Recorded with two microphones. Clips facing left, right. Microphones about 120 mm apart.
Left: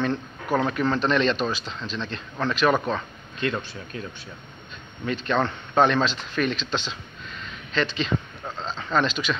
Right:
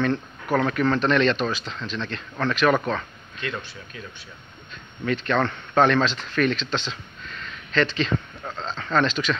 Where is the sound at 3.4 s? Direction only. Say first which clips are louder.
Left 5 dB; 30° left (ahead or behind).